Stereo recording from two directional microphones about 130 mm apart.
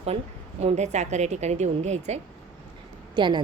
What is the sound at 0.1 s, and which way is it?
Speech, 45° right (ahead or behind).